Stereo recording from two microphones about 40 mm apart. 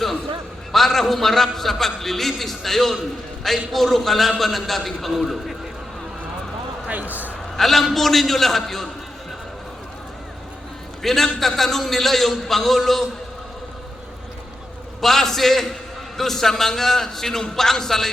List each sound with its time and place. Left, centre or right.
0.7 s a man's voice: centre
6.8 s a man's voice: right
7.5 s a man's voice: centre
11.0 s a man's voice: centre
15.0 s a man's voice: centre